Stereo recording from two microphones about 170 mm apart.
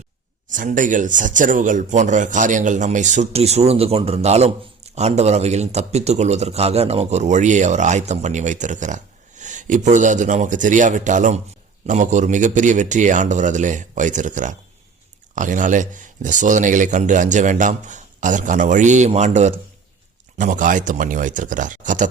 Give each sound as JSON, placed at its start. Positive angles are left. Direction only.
{"t": 0.4, "sound": "a man's voice", "side_deg": -50}